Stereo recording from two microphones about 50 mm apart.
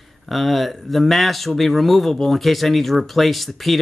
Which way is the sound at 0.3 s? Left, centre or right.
Centre.